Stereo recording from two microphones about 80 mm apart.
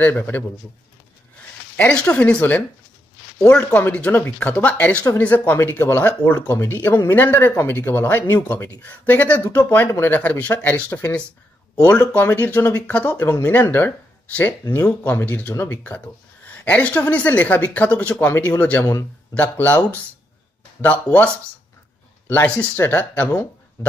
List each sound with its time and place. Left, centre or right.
0.0 s speech: left
1.8 s speech: centre
6.3 s speech: left; by 10.9 s centre
10.9 s speech: left